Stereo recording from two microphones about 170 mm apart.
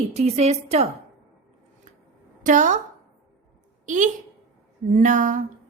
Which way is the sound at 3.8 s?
45° right (ahead or behind).